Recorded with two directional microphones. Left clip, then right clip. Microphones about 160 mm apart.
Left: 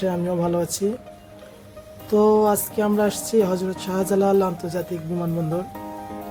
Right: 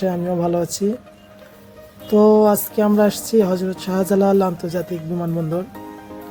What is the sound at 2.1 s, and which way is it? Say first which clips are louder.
Speech: right 4 dB; 25° right (ahead or behind).